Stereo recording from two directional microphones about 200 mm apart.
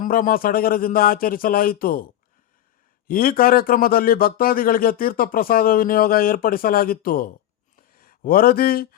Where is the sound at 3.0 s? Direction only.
45° left (ahead or behind).